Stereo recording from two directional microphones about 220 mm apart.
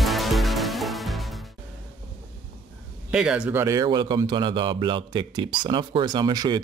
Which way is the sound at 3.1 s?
5° right (ahead or behind).